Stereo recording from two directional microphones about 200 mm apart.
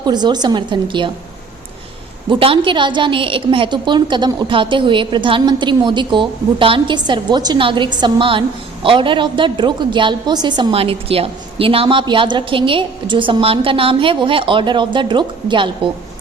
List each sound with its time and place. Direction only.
0.0 s a woman's voice: 20° right (ahead or behind)
2.3 s a woman's voice: 25° right (ahead or behind)